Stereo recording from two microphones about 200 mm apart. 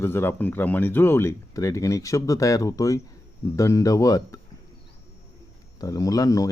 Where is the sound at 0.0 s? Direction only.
10° left (ahead or behind).